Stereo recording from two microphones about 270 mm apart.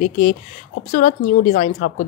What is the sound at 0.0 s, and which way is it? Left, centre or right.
A woman's voice, left.